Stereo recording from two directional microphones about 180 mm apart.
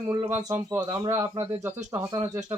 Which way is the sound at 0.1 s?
20° right (ahead or behind).